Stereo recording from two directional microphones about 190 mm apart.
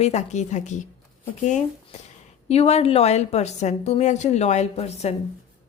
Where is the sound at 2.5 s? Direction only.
35° left (ahead or behind).